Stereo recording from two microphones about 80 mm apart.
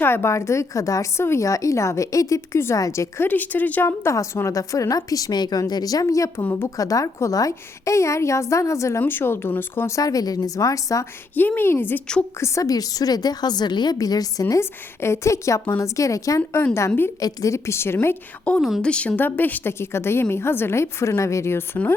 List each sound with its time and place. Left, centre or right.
0.0 s a woman's voice: left
3.2 s a woman's voice: left
9.9 s speech: left
11.3 s a woman's voice: left
12.4 s speech: left
14.6 s a woman's voice: left
18.5 s a woman's voice: centre; by 21.6 s left